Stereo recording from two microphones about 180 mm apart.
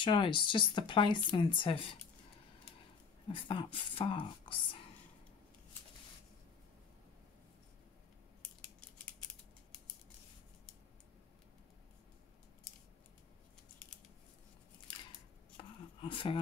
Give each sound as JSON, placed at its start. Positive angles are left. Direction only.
{"t": 0.0, "sound": "speech", "side_deg": 30}
{"t": 3.3, "sound": "speech", "side_deg": 30}
{"t": 15.5, "sound": "a sound", "side_deg": 30}